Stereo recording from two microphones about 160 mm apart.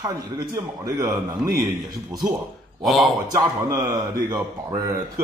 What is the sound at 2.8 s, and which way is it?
Speech, centre (ahead or behind).